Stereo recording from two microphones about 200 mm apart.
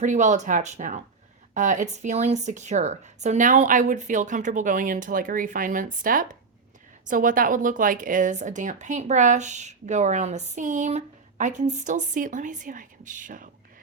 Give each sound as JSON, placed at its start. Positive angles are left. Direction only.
{"t": 0.0, "sound": "speech", "side_deg": -40}